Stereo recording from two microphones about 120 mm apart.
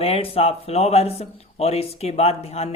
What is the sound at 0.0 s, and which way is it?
A man's voice, 55° left (ahead or behind).